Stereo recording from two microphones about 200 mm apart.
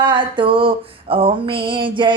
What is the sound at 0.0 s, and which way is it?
Speech, 25° right (ahead or behind).